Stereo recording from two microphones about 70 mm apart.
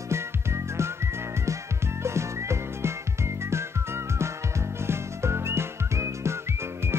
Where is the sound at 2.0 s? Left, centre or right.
Right.